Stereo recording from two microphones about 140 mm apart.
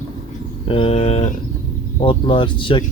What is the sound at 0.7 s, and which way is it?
Speech, 40° left (ahead or behind).